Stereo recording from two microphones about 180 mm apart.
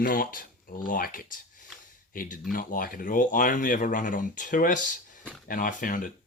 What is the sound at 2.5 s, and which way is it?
Speech, 50° left (ahead or behind).